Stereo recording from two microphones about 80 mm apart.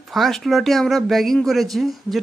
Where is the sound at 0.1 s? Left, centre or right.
Centre.